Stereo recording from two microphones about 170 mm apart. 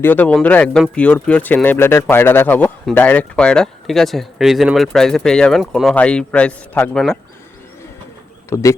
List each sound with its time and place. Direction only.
0.0 s speech: 10° left (ahead or behind)
8.4 s a man's voice: 15° left (ahead or behind)